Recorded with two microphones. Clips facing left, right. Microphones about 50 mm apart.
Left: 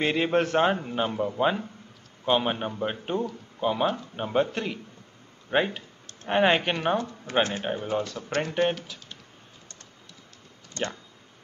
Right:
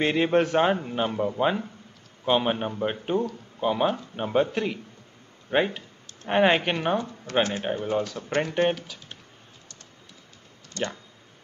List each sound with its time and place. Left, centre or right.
0.0 s a man's voice: centre
7.3 s speech: centre
7.6 s a man's voice: centre
10.8 s speech: left